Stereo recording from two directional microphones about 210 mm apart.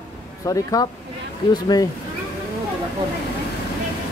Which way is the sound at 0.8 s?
15° left (ahead or behind).